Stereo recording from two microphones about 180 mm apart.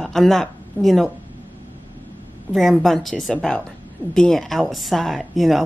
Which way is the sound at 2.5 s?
Centre (ahead or behind).